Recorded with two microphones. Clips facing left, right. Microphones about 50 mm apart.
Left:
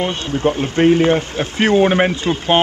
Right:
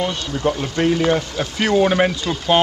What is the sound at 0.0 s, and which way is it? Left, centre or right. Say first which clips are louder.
Speech: left 3 dB; left.